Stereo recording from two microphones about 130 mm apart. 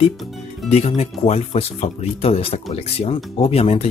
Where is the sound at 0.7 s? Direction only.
55° left (ahead or behind).